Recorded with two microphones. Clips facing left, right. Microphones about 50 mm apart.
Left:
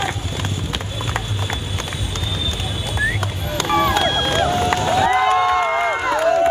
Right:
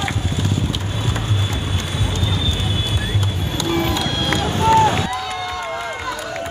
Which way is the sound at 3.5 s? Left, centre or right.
Left.